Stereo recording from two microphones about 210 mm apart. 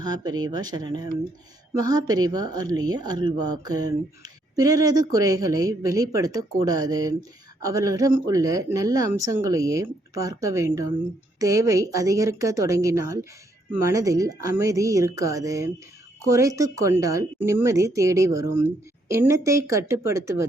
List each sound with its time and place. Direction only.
0.0 s speech: 20° right (ahead or behind)